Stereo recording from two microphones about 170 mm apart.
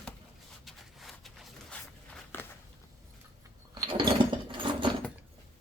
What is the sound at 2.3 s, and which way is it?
Walk, 10° left (ahead or behind).